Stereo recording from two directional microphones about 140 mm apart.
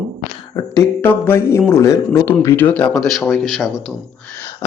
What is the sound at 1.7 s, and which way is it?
Speech, 20° left (ahead or behind).